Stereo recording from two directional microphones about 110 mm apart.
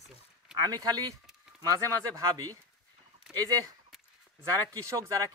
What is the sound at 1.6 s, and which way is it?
Speech, 30° right (ahead or behind).